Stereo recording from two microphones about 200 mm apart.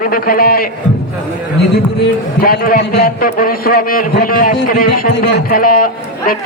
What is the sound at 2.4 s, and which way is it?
A man's voice, 50° left (ahead or behind).